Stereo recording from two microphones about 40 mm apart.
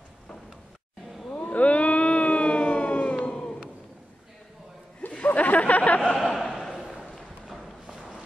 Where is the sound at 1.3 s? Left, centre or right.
Left.